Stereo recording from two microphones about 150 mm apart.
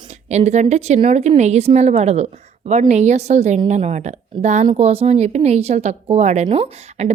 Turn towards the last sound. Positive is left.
turn(degrees=-45)  # may be behind; listen again after turning